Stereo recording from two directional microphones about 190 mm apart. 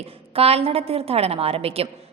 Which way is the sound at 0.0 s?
30° right (ahead or behind).